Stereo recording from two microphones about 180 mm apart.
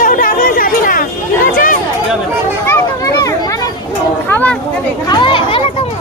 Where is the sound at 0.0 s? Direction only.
50° left (ahead or behind).